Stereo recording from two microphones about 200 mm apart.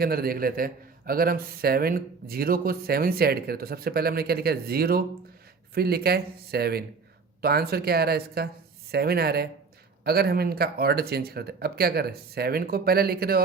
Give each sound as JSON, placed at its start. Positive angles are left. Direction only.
{"t": 0.0, "sound": "a man's voice", "side_deg": -50}